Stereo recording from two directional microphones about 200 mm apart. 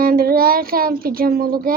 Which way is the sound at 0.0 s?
45° right (ahead or behind).